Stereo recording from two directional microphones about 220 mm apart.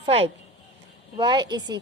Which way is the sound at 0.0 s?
25° right (ahead or behind).